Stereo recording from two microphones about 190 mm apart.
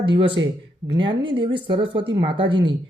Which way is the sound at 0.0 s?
25° right (ahead or behind).